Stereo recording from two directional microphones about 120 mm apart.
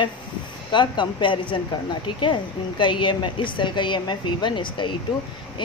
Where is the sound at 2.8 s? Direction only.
40° left (ahead or behind).